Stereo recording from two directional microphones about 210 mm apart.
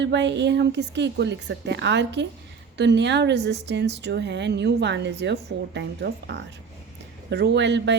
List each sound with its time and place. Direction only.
0.0 s speech: 55° right (ahead or behind)